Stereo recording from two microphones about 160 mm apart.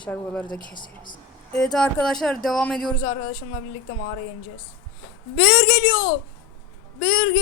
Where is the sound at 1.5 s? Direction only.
5° left (ahead or behind).